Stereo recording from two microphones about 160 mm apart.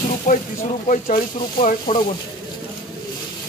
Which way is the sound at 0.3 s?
55° left (ahead or behind).